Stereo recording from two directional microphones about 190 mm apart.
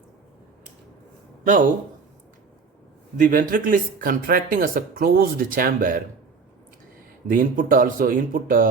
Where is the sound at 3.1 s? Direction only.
45° right (ahead or behind).